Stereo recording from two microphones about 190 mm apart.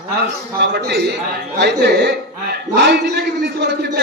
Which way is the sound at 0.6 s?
60° right (ahead or behind).